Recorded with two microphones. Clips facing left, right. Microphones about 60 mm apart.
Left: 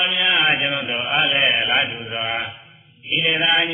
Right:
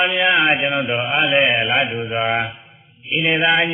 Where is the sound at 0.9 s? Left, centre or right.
Right.